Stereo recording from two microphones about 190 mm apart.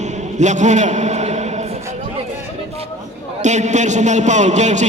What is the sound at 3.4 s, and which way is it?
A man's voice, 40° right (ahead or behind).